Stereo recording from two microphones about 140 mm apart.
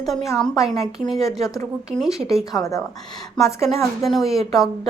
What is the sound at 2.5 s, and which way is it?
Mantra, 25° left (ahead or behind).